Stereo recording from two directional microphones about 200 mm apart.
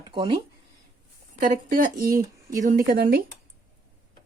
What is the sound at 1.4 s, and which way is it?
Speech, 45° right (ahead or behind).